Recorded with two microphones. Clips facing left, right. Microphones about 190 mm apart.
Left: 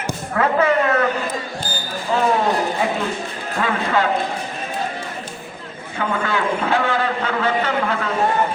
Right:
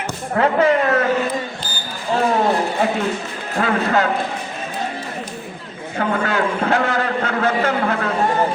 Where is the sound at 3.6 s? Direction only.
40° right (ahead or behind).